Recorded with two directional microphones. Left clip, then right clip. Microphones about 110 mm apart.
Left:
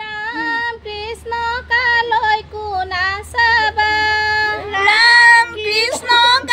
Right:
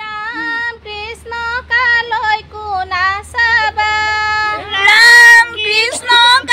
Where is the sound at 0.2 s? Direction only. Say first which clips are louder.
Even; 45° left (ahead or behind).